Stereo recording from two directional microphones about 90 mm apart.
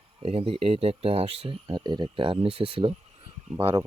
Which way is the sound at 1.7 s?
60° right (ahead or behind).